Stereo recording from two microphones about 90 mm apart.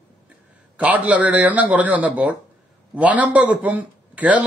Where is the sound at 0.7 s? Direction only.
15° right (ahead or behind).